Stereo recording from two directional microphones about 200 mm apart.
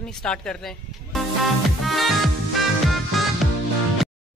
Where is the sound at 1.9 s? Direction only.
Centre (ahead or behind).